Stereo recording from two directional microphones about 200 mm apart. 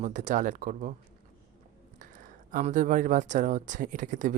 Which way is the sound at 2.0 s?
40° right (ahead or behind).